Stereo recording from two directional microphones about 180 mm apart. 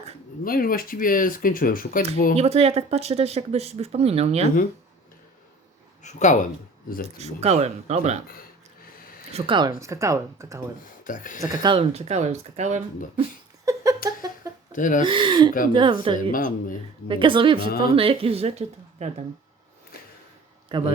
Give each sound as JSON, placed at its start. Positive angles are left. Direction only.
{"t": 0.4, "sound": "speech", "side_deg": 55}
{"t": 2.3, "sound": "speech", "side_deg": -35}
{"t": 6.0, "sound": "speech", "side_deg": 40}
{"t": 7.2, "sound": "speech", "side_deg": -35}
{"t": 9.0, "sound": "a sound", "side_deg": 55}
{"t": 9.3, "sound": "speech", "side_deg": -25}
{"t": 11.0, "sound": "speech", "side_deg": 45}
{"t": 11.4, "sound": "speech", "side_deg": -25}
{"t": 13.7, "sound": "a sound", "side_deg": -20}
{"t": 14.7, "sound": "speech", "side_deg": 45}
{"t": 15.0, "sound": "speech", "side_deg": -25}
{"t": 16.3, "sound": "speech", "side_deg": 50}
{"t": 17.1, "sound": "speech", "side_deg": -25}
{"t": 20.7, "sound": "speech", "side_deg": -25}